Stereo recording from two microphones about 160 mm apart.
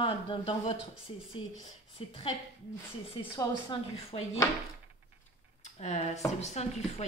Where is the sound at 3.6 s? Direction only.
30° left (ahead or behind).